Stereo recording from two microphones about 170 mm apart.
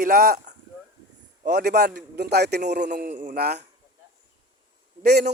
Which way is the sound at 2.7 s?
85° right.